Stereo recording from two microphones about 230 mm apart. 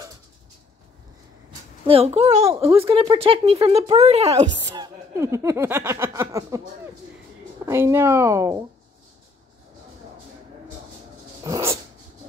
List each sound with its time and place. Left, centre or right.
1.9 s speech: right
2.7 s speech: centre
3.0 s speech: right
4.3 s speech: centre
7.6 s speech: centre
11.4 s dog: centre